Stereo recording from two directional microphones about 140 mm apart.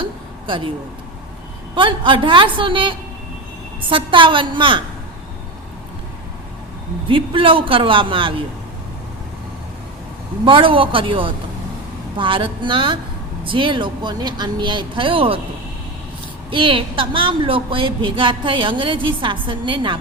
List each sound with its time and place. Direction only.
0.0 s a sound: 35° right (ahead or behind)
1.7 s a woman's voice: 35° right (ahead or behind)
7.1 s a woman's voice: 40° right (ahead or behind)
10.4 s a woman's voice: 40° right (ahead or behind)
16.5 s a woman's voice: 40° right (ahead or behind)